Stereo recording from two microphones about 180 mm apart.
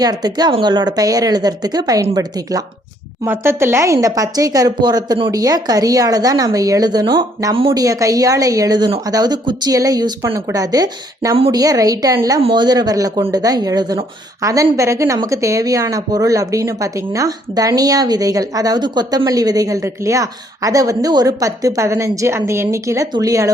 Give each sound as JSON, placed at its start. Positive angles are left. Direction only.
{"t": 0.0, "sound": "speech", "side_deg": -20}
{"t": 11.3, "sound": "a woman's voice", "side_deg": -30}
{"t": 11.6, "sound": "speech", "side_deg": -20}